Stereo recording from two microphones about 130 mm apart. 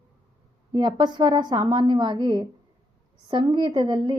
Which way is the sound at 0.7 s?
35° right (ahead or behind).